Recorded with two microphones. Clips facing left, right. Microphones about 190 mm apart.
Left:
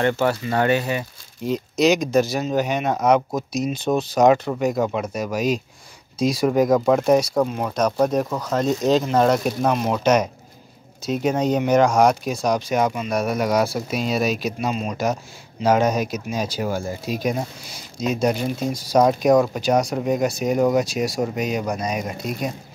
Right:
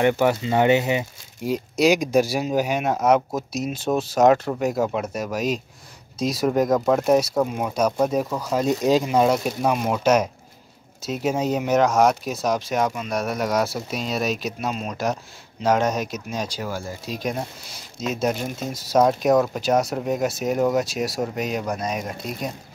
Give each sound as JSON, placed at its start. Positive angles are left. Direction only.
{"t": 0.0, "sound": "speech", "side_deg": -15}
{"t": 16.6, "sound": "speech", "side_deg": 20}
{"t": 17.1, "sound": "speech", "side_deg": 5}